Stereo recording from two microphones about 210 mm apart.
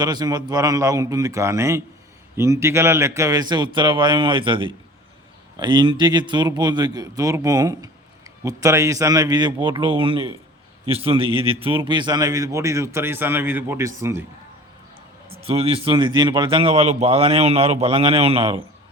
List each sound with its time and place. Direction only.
0.0 s a man's voice: 20° right (ahead or behind)
15.4 s speech: 25° right (ahead or behind)